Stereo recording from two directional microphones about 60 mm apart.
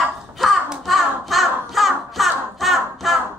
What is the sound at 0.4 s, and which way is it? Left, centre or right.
Crow, centre.